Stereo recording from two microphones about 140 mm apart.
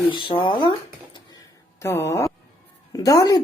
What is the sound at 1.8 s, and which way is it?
Speech, 20° left (ahead or behind).